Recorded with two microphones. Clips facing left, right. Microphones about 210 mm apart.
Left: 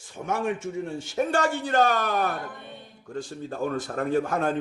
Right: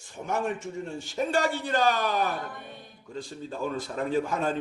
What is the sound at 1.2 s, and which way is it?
A man's voice, 50° left (ahead or behind).